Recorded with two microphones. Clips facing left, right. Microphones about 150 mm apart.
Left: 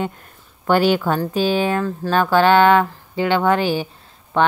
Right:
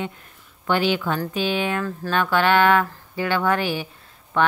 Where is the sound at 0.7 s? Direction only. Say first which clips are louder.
Left 5 dB; 45° left (ahead or behind).